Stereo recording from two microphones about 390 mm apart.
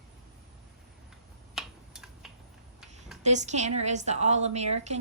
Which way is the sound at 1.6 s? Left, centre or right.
Centre.